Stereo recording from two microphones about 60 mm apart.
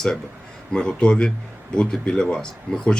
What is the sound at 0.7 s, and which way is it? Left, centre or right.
Speech, centre.